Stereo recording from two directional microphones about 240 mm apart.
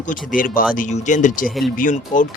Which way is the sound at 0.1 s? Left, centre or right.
Left.